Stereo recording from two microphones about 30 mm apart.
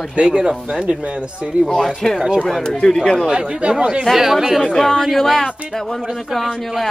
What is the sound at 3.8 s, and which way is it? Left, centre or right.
Speech, right.